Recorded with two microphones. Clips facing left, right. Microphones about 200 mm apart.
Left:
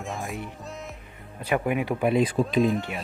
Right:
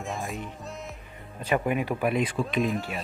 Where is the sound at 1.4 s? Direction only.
10° left (ahead or behind).